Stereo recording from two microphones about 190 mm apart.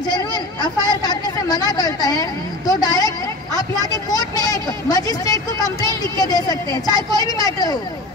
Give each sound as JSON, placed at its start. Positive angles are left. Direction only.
{"t": 0.1, "sound": "speech", "side_deg": 20}